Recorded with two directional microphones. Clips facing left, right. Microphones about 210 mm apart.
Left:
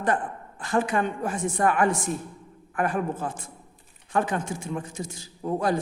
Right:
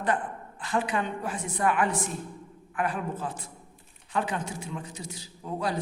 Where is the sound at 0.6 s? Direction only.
45° left (ahead or behind).